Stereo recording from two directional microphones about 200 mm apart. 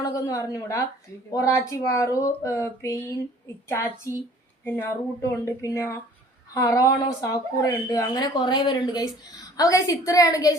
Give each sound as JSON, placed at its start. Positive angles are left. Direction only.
{"t": 0.0, "sound": "a woman's voice", "side_deg": 15}